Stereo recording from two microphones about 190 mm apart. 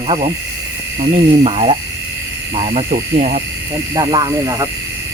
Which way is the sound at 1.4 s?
30° right (ahead or behind).